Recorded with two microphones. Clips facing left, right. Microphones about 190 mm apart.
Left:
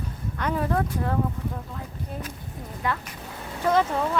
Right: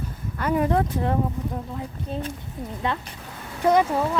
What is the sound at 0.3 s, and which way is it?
Speech, 10° right (ahead or behind).